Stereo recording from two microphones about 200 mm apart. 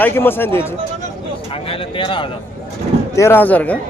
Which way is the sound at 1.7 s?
25° left (ahead or behind).